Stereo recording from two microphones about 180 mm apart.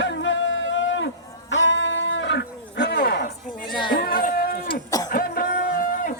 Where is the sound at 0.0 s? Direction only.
90° left; by 3.2 s 65° left (ahead or behind).